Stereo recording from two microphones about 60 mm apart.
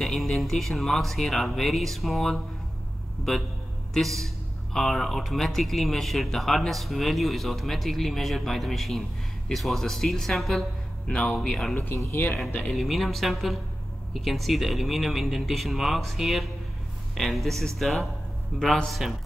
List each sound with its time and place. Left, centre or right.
0.0 s speech: centre
11.1 s speech: centre
11.7 s speech: left
12.7 s speech: centre